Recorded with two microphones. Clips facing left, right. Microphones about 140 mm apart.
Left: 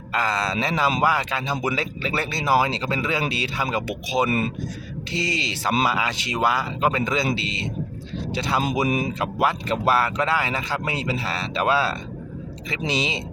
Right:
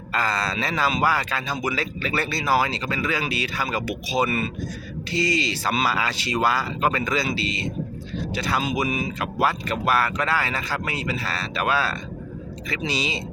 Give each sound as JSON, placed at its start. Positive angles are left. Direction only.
{"t": 0.1, "sound": "speech", "side_deg": 15}
{"t": 8.9, "sound": "speech", "side_deg": 50}
{"t": 9.4, "sound": "speech", "side_deg": 20}